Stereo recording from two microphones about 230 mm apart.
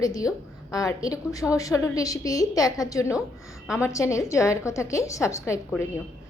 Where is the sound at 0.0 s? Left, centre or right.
Centre.